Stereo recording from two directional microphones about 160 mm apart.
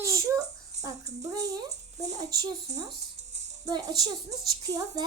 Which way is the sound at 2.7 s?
45° right (ahead or behind).